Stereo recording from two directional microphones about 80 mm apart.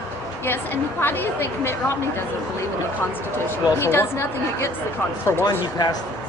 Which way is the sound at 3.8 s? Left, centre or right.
Left.